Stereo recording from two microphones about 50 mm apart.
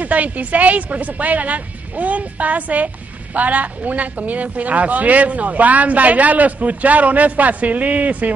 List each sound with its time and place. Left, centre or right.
0.0 s speech: right